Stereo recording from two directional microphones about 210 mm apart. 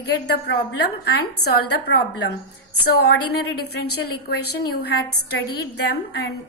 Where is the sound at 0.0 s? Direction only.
55° left (ahead or behind).